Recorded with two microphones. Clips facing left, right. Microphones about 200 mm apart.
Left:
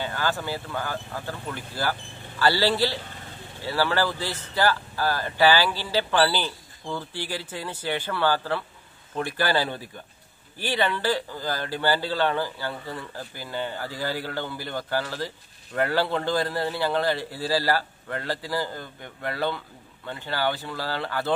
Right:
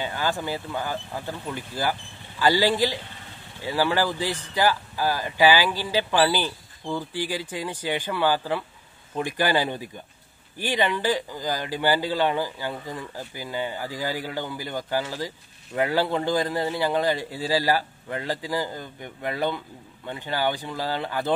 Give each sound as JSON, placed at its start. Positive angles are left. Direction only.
{"t": 0.0, "sound": "speech", "side_deg": -15}